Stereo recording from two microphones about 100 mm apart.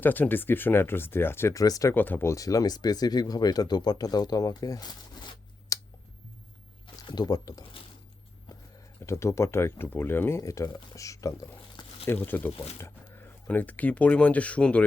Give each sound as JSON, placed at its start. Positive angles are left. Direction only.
{"t": 0.0, "sound": "speech", "side_deg": 20}
{"t": 1.6, "sound": "speech", "side_deg": 40}
{"t": 1.9, "sound": "speech", "side_deg": 20}
{"t": 6.8, "sound": "speech", "side_deg": 50}
{"t": 9.0, "sound": "speech", "side_deg": 30}
{"t": 12.0, "sound": "speech", "side_deg": 20}
{"t": 13.5, "sound": "speech", "side_deg": 15}